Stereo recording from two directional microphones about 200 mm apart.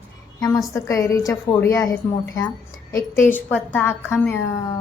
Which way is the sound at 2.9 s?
15° left (ahead or behind).